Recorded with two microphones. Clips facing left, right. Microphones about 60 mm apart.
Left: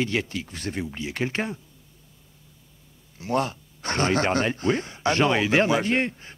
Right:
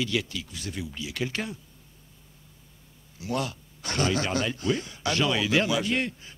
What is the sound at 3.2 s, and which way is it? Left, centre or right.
Speech, left.